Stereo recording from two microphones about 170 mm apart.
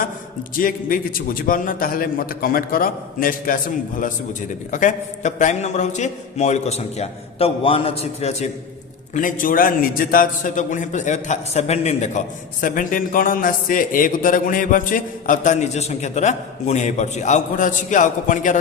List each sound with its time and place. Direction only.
0.6 s a man's voice: 55° left (ahead or behind); by 8.4 s 40° left (ahead or behind)
9.1 s a man's voice: 50° left (ahead or behind)